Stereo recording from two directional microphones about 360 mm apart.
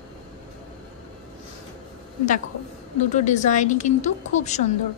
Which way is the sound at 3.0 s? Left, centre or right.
Centre.